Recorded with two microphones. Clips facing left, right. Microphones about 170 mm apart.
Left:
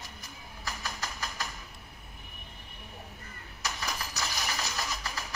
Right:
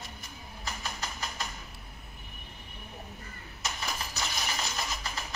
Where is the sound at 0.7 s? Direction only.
20° right (ahead or behind).